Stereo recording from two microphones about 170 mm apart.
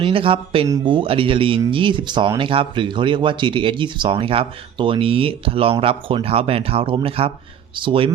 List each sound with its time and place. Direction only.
0.0 s speech: 30° right (ahead or behind)